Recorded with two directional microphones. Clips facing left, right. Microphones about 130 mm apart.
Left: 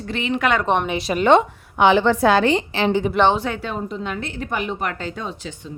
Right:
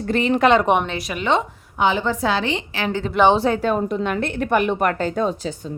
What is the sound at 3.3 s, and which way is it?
A woman's voice, 35° right (ahead or behind).